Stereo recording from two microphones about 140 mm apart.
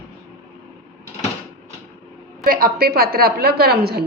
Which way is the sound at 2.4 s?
90° right.